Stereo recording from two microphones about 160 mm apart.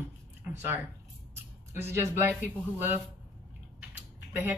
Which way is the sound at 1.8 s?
15° right (ahead or behind).